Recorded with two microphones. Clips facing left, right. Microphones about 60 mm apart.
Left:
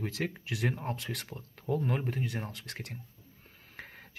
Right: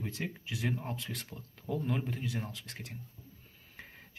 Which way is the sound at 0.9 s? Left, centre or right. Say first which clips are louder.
Left 2 dB; left.